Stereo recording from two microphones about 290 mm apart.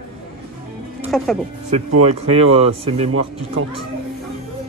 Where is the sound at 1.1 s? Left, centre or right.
Centre.